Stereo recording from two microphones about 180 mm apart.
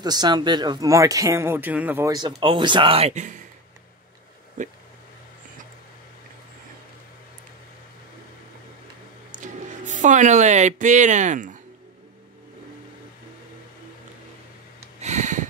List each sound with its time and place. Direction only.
0.0 s speech: 20° right (ahead or behind); by 3.3 s 40° right (ahead or behind)
9.3 s speech: 45° right (ahead or behind)
15.0 s a sound: 40° right (ahead or behind)